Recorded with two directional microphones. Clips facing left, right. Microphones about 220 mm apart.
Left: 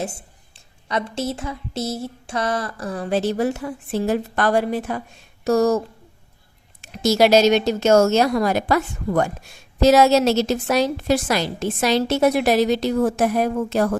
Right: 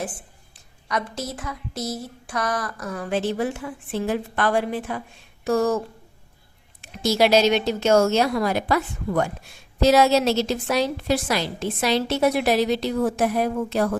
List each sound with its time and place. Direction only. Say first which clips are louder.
0.0 s a woman's voice: left 3 dB; 25° left (ahead or behind)
0.9 s a sound: left 4 dB; 25° left (ahead or behind)
6.8 s a woman's voice: left 3 dB; 45° left (ahead or behind)